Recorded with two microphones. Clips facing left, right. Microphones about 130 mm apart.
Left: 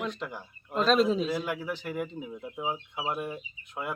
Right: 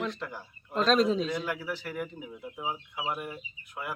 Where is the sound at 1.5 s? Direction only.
20° left (ahead or behind).